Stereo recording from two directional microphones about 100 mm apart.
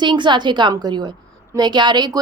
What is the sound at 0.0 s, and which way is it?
A woman's voice, 50° right (ahead or behind).